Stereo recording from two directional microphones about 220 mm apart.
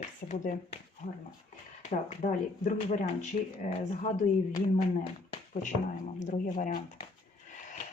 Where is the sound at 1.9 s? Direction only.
30° left (ahead or behind).